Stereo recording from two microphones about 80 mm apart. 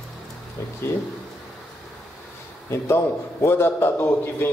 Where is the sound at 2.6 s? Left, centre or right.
Left.